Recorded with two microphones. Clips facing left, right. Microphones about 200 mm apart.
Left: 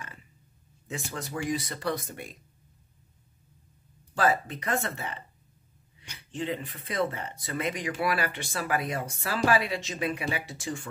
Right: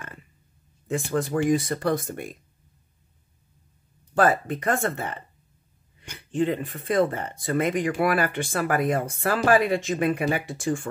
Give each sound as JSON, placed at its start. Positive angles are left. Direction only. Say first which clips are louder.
{"t": 0.8, "sound": "speech", "louder": "right 11 dB", "side_deg": -50}
{"t": 4.1, "sound": "speech", "louder": "right 5 dB", "side_deg": -55}